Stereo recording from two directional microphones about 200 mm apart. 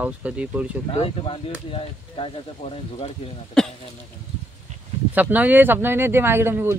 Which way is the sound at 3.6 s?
Centre (ahead or behind).